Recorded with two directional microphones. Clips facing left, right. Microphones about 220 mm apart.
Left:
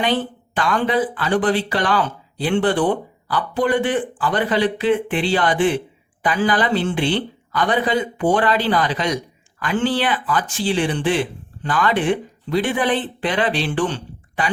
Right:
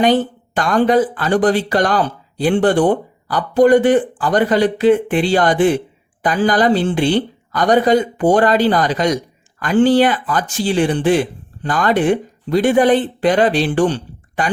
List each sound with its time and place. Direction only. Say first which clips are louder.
0.0 s speech: right 7 dB; 45° right (ahead or behind)